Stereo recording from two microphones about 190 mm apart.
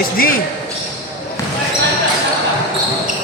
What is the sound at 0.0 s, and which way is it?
Speech, 50° left (ahead or behind).